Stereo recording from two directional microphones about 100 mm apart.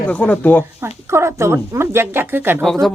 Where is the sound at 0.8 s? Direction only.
25° right (ahead or behind).